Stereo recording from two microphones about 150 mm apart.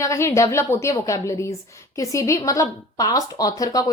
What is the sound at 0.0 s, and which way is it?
A woman's voice, 20° left (ahead or behind).